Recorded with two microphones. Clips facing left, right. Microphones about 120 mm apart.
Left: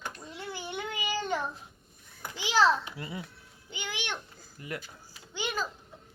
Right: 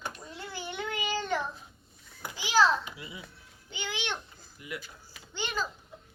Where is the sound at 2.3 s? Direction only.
25° left (ahead or behind).